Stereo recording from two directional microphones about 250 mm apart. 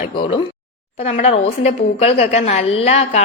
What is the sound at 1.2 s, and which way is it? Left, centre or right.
A woman's voice, left.